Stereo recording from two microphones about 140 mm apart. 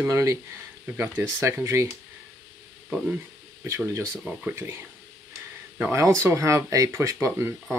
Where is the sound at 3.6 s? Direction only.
20° right (ahead or behind).